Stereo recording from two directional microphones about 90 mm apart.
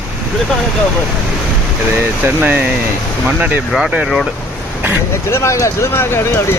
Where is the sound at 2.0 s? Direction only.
20° right (ahead or behind).